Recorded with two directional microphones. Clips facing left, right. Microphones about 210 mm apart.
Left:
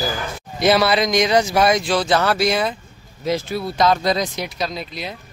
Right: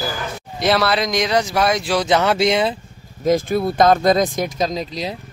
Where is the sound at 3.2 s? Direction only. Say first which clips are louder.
Right 5 dB; 50° right (ahead or behind).